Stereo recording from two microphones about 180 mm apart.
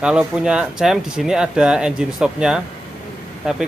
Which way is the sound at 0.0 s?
5° right (ahead or behind).